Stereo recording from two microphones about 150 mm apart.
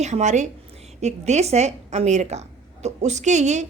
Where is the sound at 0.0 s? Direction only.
50° right (ahead or behind).